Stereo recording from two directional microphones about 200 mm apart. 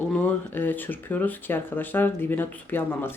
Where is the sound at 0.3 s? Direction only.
10° left (ahead or behind).